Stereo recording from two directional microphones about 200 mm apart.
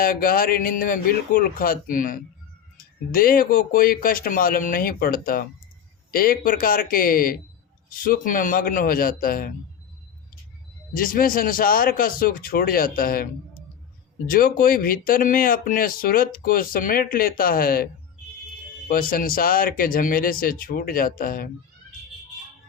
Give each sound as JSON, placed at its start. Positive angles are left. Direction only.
{"t": 0.0, "sound": "speech", "side_deg": 45}
{"t": 10.9, "sound": "speech", "side_deg": 45}
{"t": 18.9, "sound": "speech", "side_deg": 45}